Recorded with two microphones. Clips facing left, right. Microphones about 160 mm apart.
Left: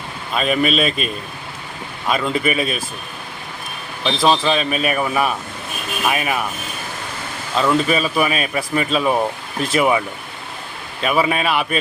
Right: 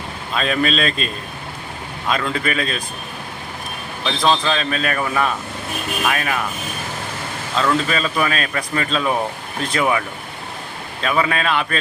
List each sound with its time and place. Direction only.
0.3 s speech: 10° left (ahead or behind)
4.0 s speech: 10° left (ahead or behind)
7.6 s speech: 10° left (ahead or behind)
11.0 s speech: 10° left (ahead or behind)